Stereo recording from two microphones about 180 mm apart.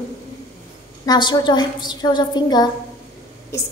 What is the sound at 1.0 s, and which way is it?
A woman's voice, 25° left (ahead or behind).